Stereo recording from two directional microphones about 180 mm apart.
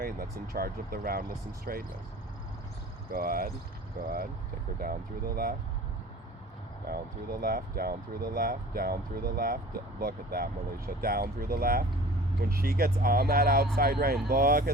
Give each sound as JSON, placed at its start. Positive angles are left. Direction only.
{"t": 0.0, "sound": "speech", "side_deg": -55}
{"t": 3.1, "sound": "speech", "side_deg": -55}
{"t": 6.8, "sound": "speech", "side_deg": -55}